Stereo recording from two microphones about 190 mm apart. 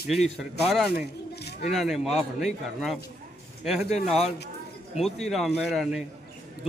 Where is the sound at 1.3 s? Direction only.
60° left (ahead or behind).